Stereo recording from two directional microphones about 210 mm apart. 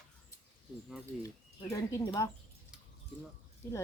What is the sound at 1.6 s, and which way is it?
Speech, 15° left (ahead or behind).